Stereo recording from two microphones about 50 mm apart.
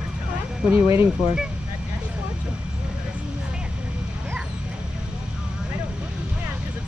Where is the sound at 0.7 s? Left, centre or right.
Right.